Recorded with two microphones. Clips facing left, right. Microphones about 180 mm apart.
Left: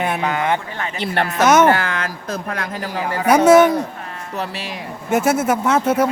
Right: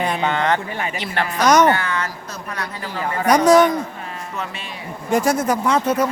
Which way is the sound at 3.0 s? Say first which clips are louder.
Left 2 dB; 5° left (ahead or behind).